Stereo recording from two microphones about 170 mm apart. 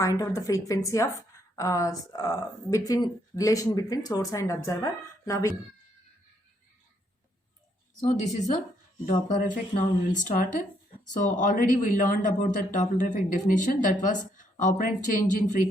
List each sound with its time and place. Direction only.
0.0 s speech: 20° left (ahead or behind)
8.0 s a man's voice: 45° left (ahead or behind)